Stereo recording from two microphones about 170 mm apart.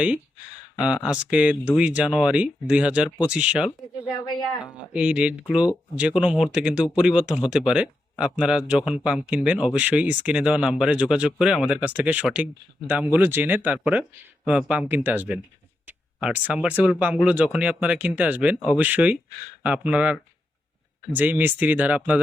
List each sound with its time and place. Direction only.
0.0 s speech: 5° right (ahead or behind)